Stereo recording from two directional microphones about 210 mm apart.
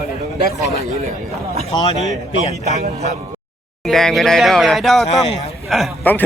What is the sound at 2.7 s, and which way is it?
Speech, 30° right (ahead or behind).